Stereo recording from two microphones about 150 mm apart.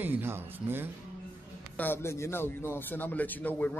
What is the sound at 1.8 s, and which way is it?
A man's voice, 15° left (ahead or behind).